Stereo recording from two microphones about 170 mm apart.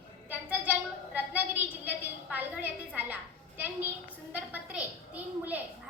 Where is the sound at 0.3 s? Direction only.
10° right (ahead or behind).